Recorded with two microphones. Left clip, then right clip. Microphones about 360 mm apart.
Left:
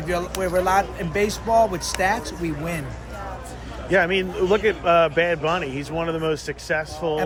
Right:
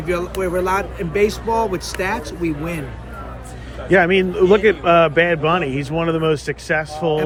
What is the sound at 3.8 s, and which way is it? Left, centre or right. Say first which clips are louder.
A man's voice: right 5 dB; centre.